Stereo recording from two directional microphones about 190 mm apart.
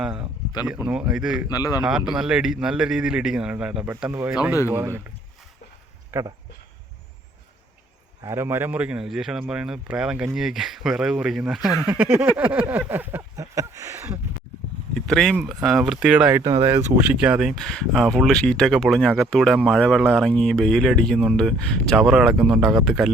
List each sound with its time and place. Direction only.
0.0 s speech: 5° right (ahead or behind)
1.5 s a man's voice: 20° left (ahead or behind)
1.8 s a man's voice: 5° right (ahead or behind)
6.1 s speech: 15° right (ahead or behind)
8.2 s a man's voice: 15° right (ahead or behind)
12.4 s a sound: 10° right (ahead or behind)
14.9 s speech: centre (ahead or behind)
16.4 s speech: 20° right (ahead or behind); by 23.1 s centre (ahead or behind)